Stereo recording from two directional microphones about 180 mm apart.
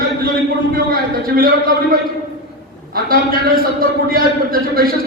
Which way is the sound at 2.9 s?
55° right (ahead or behind).